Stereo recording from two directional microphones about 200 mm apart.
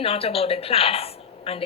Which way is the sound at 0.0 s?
30° left (ahead or behind).